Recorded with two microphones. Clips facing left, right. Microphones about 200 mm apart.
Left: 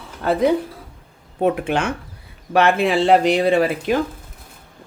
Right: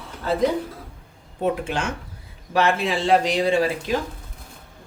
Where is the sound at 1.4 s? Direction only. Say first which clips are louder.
Left 5 dB; 60° left (ahead or behind).